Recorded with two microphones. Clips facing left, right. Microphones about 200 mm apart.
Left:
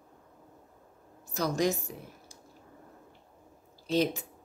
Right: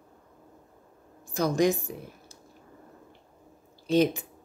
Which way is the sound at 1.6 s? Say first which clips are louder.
Right 5 dB; 15° right (ahead or behind).